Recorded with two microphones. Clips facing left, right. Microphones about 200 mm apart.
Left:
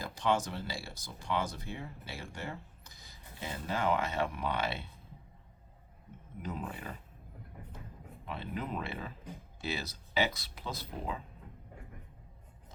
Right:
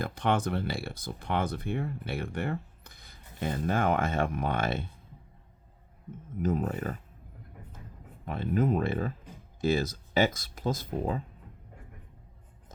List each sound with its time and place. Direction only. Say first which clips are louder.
0.0 s speech: right 3 dB; 55° right (ahead or behind)
6.4 s speech: right 11 dB; 45° right (ahead or behind)
8.2 s speech: right 11 dB; 50° right (ahead or behind)